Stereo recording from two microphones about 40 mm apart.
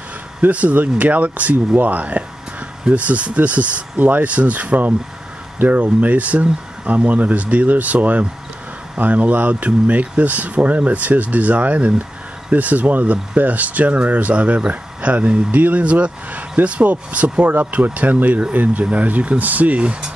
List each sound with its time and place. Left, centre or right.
0.4 s speech: right